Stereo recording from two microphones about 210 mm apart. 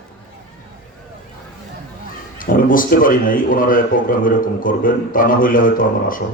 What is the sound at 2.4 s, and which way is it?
Speech, 40° left (ahead or behind).